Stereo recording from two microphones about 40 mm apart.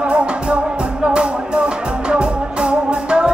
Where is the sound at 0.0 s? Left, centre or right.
Right.